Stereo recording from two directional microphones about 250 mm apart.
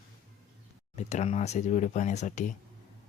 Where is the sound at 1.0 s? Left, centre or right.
Left.